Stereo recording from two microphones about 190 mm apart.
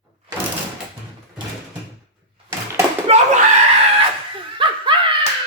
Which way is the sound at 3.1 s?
35° right (ahead or behind).